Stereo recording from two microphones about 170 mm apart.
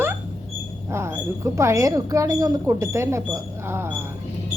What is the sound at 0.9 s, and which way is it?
Speech, 15° right (ahead or behind).